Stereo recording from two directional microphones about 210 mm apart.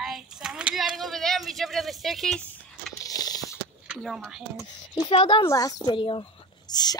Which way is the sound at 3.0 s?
20° left (ahead or behind).